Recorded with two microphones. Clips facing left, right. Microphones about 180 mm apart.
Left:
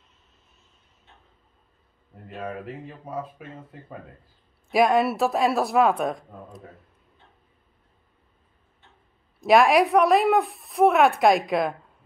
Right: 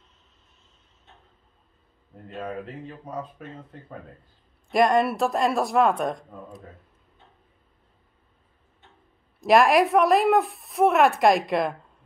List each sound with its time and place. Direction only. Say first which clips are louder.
2.2 s speech: even; 5° left (ahead or behind)
4.6 s speech: even; 5° left (ahead or behind)
9.4 s speech: even; centre (ahead or behind)